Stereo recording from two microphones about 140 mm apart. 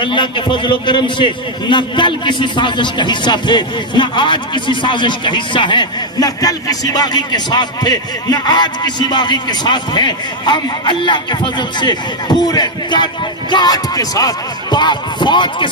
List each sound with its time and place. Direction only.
0.0 s a man's voice: 35° left (ahead or behind)